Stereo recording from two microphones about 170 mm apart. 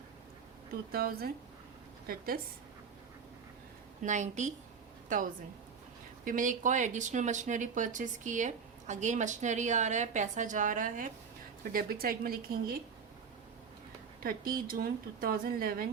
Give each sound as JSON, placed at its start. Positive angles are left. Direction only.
{"t": 0.9, "sound": "a woman's voice", "side_deg": -65}
{"t": 4.0, "sound": "a woman's voice", "side_deg": -45}
{"t": 14.2, "sound": "a woman's voice", "side_deg": -60}